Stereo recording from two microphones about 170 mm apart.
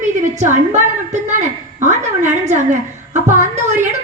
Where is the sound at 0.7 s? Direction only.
45° right (ahead or behind).